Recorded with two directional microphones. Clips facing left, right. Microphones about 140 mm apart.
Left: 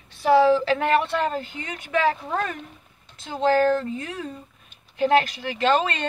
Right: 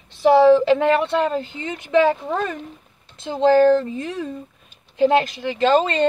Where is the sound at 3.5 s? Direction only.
25° right (ahead or behind).